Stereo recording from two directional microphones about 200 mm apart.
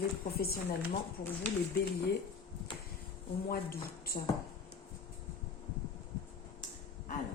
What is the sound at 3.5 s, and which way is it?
Speech, 50° left (ahead or behind).